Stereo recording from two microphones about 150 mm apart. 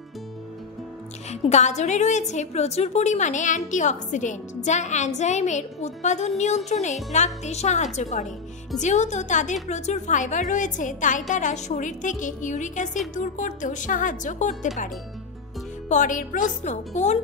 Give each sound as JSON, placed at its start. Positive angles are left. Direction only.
{"t": 1.3, "sound": "a woman's voice", "side_deg": 50}
{"t": 15.9, "sound": "a woman's voice", "side_deg": 55}